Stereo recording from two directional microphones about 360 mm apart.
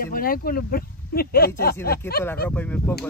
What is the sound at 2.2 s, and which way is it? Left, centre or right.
Speech, centre.